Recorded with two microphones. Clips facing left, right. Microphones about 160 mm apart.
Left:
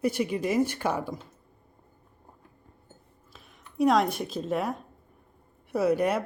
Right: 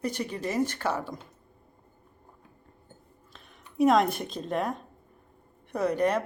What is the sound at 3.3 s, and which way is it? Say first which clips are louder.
A woman's voice: even; 5° left (ahead or behind).